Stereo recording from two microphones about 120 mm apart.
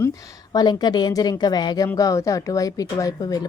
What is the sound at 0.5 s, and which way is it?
Speech, 35° left (ahead or behind).